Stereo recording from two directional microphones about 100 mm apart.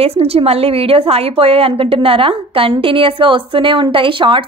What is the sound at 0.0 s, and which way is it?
A woman's voice, 70° right (ahead or behind).